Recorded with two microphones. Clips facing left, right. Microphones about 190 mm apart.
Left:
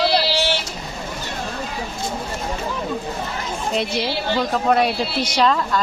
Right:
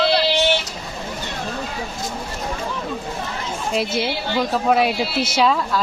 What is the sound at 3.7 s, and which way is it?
Speech, 5° right (ahead or behind).